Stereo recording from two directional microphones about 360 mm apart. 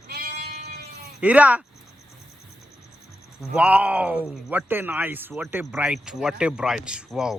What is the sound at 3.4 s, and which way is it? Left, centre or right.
Speech, centre.